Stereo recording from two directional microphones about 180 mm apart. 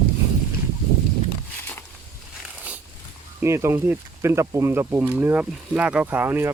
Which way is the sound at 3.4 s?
15° right (ahead or behind).